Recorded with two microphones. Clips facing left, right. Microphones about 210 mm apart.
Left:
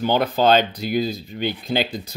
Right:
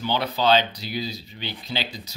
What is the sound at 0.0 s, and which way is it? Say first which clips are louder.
Speech: left 5 dB; 50° left (ahead or behind).